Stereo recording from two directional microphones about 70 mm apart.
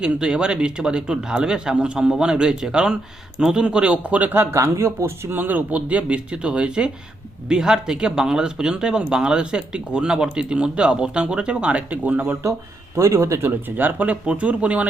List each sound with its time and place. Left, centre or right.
0.0 s speech: centre
4.5 s speech: right
5.4 s speech: right
13.0 s speech: right
13.7 s speech: right